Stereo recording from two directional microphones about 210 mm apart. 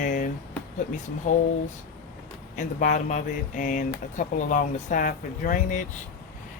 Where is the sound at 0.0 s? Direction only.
40° left (ahead or behind).